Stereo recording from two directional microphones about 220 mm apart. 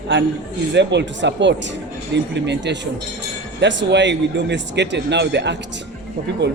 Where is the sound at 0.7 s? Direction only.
50° right (ahead or behind).